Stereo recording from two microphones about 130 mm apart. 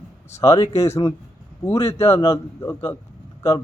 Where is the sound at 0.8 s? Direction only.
20° left (ahead or behind).